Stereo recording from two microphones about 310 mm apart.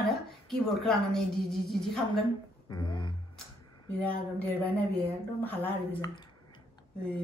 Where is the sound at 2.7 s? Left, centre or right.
Centre.